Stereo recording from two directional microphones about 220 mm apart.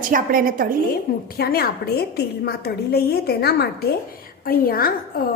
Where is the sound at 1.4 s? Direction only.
45° left (ahead or behind).